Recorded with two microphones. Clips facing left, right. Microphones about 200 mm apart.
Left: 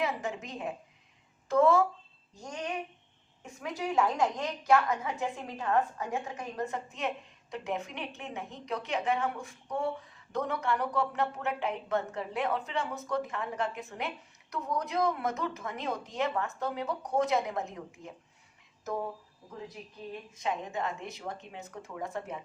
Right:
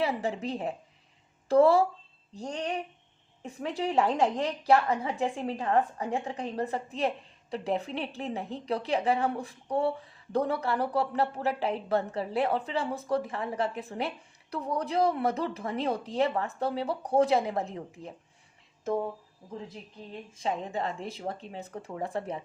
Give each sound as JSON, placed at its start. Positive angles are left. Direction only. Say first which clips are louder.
{"t": 0.0, "sound": "a woman's voice", "louder": "right 4 dB", "side_deg": -30}
{"t": 20.3, "sound": "a woman's voice", "louder": "right 3 dB", "side_deg": -30}